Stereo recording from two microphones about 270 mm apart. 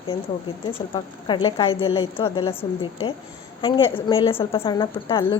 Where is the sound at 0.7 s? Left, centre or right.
Centre.